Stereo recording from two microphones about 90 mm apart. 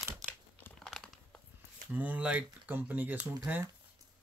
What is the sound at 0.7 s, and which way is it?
Crumpling, 5° left (ahead or behind).